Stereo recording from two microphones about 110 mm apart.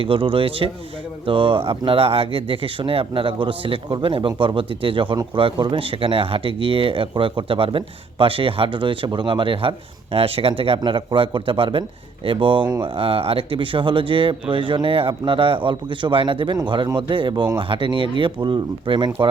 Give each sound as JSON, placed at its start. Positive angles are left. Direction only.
{"t": 0.0, "sound": "speech", "side_deg": -55}